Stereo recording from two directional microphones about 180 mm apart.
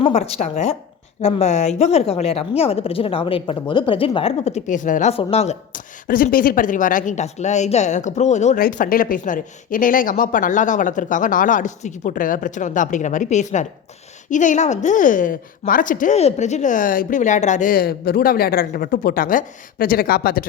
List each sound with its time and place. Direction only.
0.0 s a woman's voice: 35° left (ahead or behind); by 20.5 s 55° left (ahead or behind)